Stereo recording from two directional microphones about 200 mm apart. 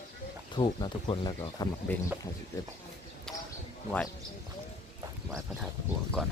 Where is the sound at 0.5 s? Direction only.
25° left (ahead or behind).